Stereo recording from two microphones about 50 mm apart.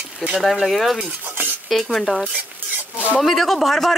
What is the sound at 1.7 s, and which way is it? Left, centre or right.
Speech, centre.